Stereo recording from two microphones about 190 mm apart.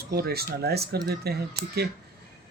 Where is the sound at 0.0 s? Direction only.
55° right (ahead or behind).